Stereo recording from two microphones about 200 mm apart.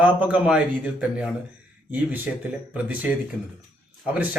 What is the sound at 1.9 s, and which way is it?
Speech, 10° right (ahead or behind).